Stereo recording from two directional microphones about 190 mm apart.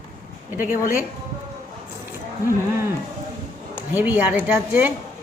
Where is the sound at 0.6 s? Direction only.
45° left (ahead or behind).